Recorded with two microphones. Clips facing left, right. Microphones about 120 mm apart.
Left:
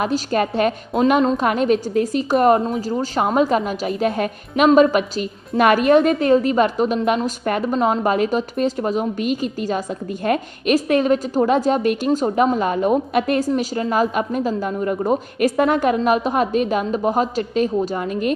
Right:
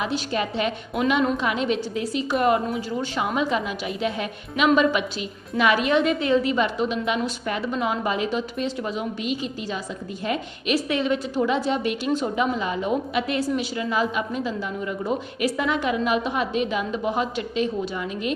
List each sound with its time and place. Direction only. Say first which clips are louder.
0.0 s a woman's voice: left 6 dB; 45° left (ahead or behind)